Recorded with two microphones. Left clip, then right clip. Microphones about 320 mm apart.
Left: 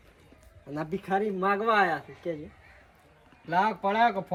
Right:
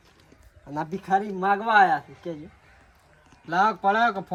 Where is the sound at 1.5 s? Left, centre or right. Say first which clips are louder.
Right 7 dB; right.